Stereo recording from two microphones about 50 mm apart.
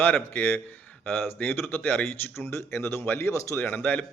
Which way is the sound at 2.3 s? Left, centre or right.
Left.